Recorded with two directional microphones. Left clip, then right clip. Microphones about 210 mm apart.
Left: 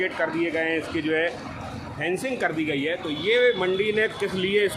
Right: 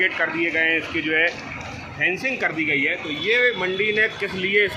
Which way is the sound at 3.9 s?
45° left (ahead or behind).